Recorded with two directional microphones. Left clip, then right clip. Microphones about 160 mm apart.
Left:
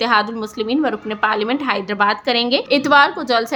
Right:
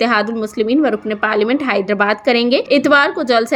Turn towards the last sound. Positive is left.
turn(degrees=-20)  # may be behind; listen again after turning